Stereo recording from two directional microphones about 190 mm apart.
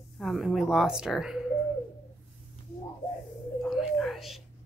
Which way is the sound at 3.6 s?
Centre (ahead or behind).